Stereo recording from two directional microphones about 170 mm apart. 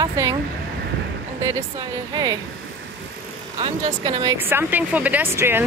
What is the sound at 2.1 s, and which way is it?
Speech, 25° right (ahead or behind).